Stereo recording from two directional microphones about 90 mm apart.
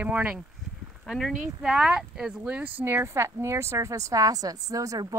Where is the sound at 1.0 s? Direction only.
Centre (ahead or behind).